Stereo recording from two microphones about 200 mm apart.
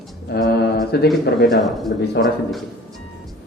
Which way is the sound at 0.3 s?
55° left (ahead or behind).